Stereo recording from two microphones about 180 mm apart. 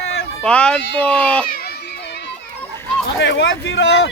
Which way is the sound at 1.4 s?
55° left (ahead or behind).